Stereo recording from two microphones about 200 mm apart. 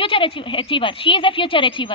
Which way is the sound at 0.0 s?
25° left (ahead or behind).